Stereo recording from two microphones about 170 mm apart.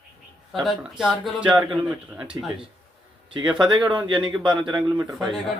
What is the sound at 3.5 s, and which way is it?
Speech, 25° right (ahead or behind).